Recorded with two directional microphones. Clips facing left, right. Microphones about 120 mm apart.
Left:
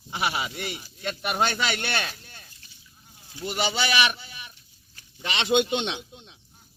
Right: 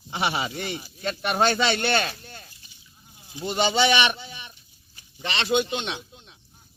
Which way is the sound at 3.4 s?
20° right (ahead or behind).